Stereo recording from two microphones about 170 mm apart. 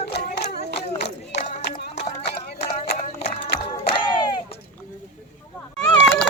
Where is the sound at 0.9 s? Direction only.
90° left.